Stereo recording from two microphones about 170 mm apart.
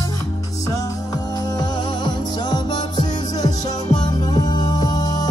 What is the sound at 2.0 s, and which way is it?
Music, 25° left (ahead or behind).